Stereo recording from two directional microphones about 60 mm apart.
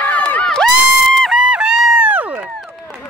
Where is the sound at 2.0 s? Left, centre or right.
Right.